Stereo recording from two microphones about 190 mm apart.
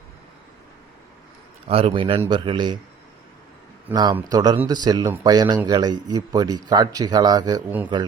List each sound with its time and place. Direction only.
1.6 s speech: 30° right (ahead or behind)
3.9 s speech: 20° right (ahead or behind)